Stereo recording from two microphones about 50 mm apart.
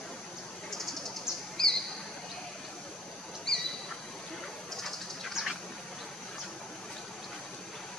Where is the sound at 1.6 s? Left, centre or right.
Centre.